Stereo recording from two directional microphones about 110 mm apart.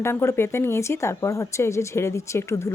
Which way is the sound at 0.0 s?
25° left (ahead or behind).